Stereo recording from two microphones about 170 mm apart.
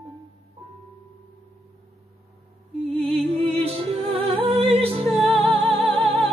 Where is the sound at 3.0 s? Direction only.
35° right (ahead or behind).